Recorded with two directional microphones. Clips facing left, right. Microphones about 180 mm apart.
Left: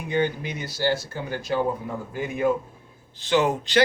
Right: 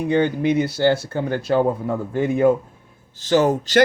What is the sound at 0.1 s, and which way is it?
Speech, 60° right (ahead or behind).